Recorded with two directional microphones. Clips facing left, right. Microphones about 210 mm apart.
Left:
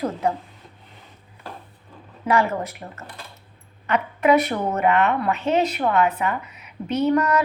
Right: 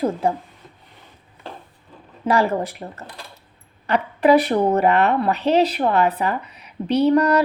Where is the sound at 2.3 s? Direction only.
35° right (ahead or behind).